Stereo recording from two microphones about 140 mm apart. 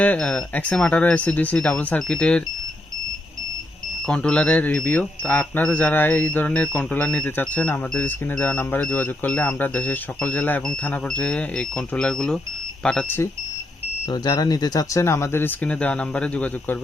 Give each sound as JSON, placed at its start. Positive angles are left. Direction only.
{"t": 0.0, "sound": "speech", "side_deg": 10}
{"t": 4.0, "sound": "speech", "side_deg": 5}
{"t": 14.1, "sound": "speech", "side_deg": 30}